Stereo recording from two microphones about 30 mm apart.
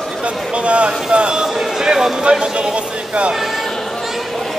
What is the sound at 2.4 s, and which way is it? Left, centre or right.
Music, right.